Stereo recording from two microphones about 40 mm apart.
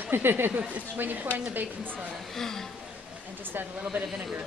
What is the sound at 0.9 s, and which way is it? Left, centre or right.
Speech, right.